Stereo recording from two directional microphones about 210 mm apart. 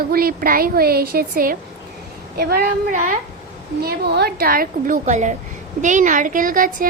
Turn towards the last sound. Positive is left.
turn(degrees=-40)  # may be behind; listen again after turning